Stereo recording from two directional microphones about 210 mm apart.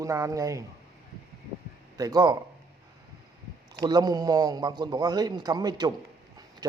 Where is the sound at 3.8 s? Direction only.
20° right (ahead or behind).